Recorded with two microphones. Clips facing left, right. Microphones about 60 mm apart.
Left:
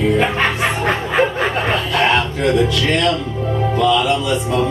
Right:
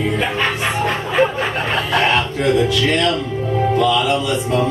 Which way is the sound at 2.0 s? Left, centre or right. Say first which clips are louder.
Left 1 dB; centre.